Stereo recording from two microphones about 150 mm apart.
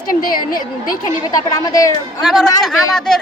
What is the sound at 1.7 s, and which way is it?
Speech, 25° left (ahead or behind).